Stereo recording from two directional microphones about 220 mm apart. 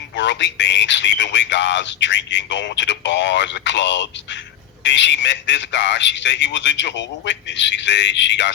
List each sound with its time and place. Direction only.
0.2 s a man's voice: 55° left (ahead or behind)